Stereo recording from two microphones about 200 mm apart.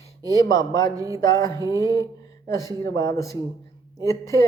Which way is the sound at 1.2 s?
15° left (ahead or behind).